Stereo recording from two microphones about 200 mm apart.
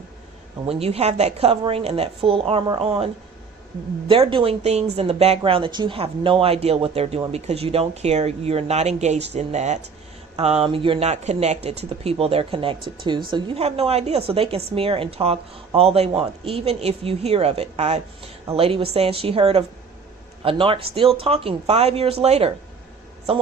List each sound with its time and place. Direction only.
0.6 s speech: 30° right (ahead or behind)
4.1 s speech: 25° right (ahead or behind)